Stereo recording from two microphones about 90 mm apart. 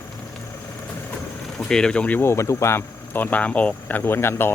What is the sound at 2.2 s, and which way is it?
Speech, 30° left (ahead or behind).